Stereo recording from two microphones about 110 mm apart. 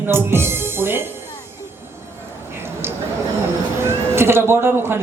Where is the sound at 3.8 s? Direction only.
20° right (ahead or behind).